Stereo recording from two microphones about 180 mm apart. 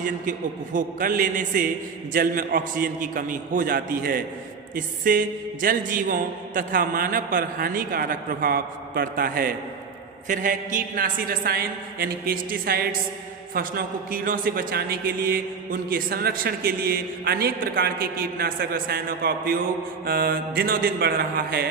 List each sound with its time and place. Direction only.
0.0 s music: 45° right (ahead or behind)
13.5 s a man's voice: 55° right (ahead or behind)